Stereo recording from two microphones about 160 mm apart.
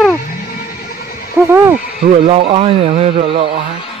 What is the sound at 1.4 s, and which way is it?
Speech, 15° right (ahead or behind).